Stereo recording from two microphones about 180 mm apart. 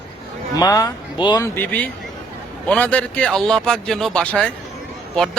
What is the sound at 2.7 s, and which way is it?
Speech, 10° left (ahead or behind).